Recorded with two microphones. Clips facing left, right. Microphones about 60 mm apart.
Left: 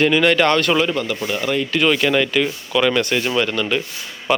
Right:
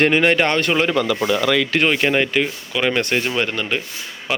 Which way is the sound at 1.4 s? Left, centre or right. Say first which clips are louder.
Left 1 dB; right.